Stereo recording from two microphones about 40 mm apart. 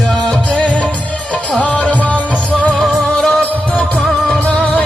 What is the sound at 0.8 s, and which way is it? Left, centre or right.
Music, left.